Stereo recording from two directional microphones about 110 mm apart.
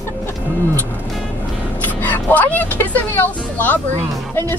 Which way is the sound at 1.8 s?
15° left (ahead or behind).